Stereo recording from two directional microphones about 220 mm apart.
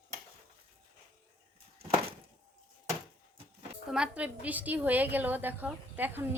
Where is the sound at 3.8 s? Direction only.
5° right (ahead or behind).